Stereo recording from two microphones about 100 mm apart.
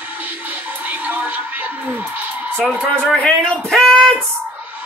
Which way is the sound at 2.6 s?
5° left (ahead or behind).